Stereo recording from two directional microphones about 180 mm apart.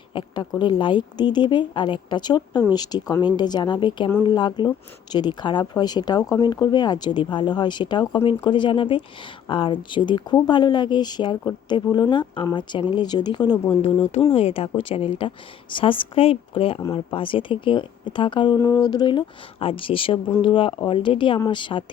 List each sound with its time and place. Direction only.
0.1 s a woman's voice: 25° left (ahead or behind)
13.8 s speech: 35° left (ahead or behind)